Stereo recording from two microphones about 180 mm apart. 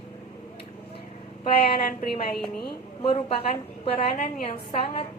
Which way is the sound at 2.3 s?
Centre (ahead or behind).